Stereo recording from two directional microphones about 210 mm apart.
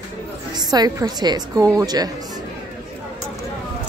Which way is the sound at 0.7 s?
20° right (ahead or behind).